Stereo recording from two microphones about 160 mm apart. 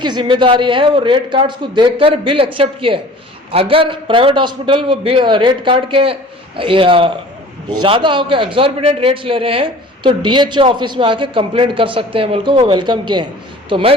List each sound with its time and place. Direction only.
0.0 s a man's voice: 30° right (ahead or behind)